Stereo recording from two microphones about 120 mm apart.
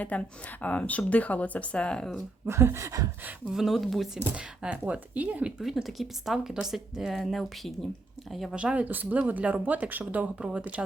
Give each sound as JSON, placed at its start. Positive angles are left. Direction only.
{"t": 0.0, "sound": "a woman's voice", "side_deg": 10}
{"t": 2.5, "sound": "a sound", "side_deg": -20}
{"t": 3.5, "sound": "speech", "side_deg": -5}
{"t": 4.2, "sound": "speech", "side_deg": -10}